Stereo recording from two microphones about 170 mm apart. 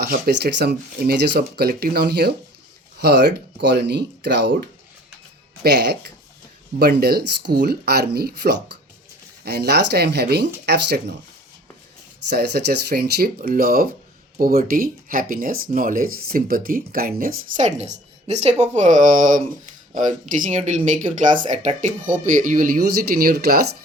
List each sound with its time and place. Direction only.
0.0 s speech: 65° right (ahead or behind)
3.0 s speech: 85° right
6.7 s speech: 65° right (ahead or behind)
12.3 s speech: 75° right (ahead or behind); by 17.7 s 55° right (ahead or behind)
17.7 s a woman's voice: 40° right (ahead or behind); by 23.6 s 65° right (ahead or behind)